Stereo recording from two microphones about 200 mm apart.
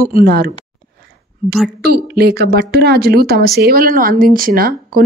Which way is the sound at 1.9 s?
50° right (ahead or behind).